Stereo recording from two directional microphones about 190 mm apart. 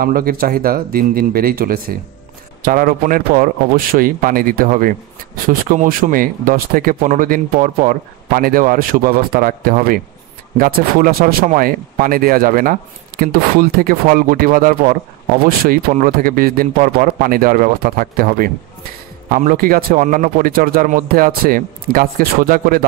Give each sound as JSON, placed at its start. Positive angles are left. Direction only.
{"t": 0.0, "sound": "speech", "side_deg": -50}